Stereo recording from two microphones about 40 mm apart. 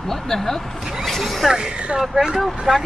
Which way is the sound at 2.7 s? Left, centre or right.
Centre.